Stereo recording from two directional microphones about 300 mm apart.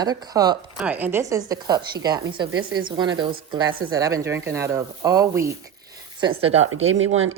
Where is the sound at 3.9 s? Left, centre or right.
Centre.